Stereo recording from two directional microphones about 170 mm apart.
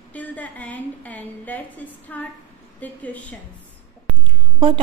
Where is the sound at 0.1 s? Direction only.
10° left (ahead or behind).